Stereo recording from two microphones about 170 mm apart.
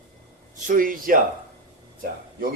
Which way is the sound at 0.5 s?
50° right (ahead or behind).